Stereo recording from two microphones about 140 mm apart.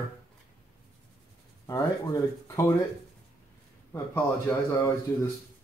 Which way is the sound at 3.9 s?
15° left (ahead or behind).